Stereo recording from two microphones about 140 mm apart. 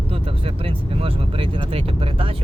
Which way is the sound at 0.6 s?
40° right (ahead or behind).